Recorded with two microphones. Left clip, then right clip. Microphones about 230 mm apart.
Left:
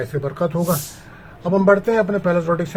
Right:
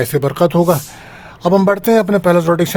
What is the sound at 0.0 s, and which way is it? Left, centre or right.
Speech, right.